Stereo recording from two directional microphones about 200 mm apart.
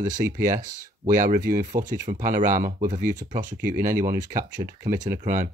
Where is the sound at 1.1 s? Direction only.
40° right (ahead or behind).